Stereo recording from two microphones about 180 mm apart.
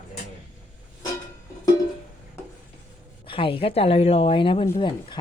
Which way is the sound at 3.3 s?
30° left (ahead or behind).